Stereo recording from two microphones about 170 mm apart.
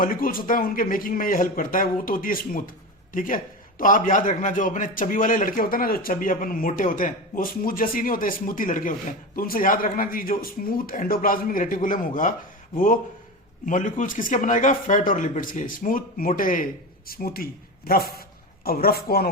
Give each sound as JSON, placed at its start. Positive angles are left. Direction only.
{"t": 0.0, "sound": "a man's voice", "side_deg": 55}